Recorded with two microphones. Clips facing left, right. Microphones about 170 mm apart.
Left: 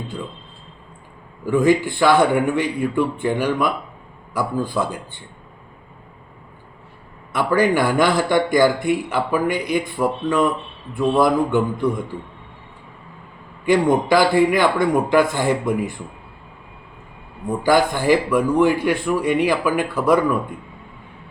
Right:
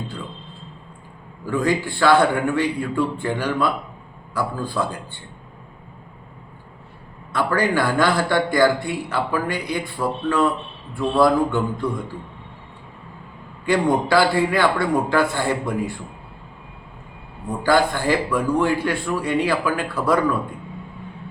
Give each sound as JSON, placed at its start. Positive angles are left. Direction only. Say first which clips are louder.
{"t": 1.5, "sound": "a man's voice", "louder": "left 5 dB", "side_deg": 20}
{"t": 7.3, "sound": "a man's voice", "louder": "left 3 dB", "side_deg": 15}
{"t": 13.7, "sound": "a man's voice", "louder": "left 3 dB", "side_deg": 20}
{"t": 17.6, "sound": "a man's voice", "louder": "left 1 dB", "side_deg": 15}